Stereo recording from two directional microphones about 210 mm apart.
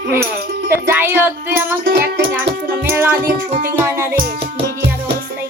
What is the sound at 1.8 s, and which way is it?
Music, 45° right (ahead or behind).